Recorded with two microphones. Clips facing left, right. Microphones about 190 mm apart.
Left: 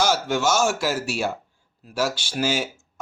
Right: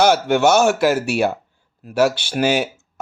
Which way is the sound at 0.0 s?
60° right (ahead or behind).